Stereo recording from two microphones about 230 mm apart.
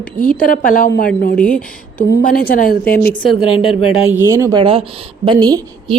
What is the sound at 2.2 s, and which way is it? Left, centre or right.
Speech, left.